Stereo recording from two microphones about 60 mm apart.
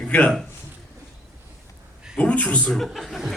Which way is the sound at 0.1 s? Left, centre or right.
Left.